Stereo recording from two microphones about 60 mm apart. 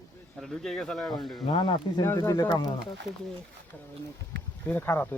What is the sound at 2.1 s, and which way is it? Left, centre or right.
Speech, left.